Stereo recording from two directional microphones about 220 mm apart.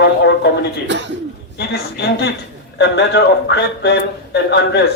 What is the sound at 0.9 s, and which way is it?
Speech, 55° right (ahead or behind).